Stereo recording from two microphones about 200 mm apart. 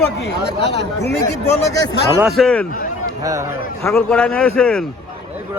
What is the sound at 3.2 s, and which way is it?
Speech, 15° right (ahead or behind).